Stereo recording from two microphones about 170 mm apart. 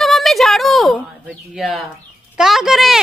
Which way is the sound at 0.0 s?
Centre (ahead or behind).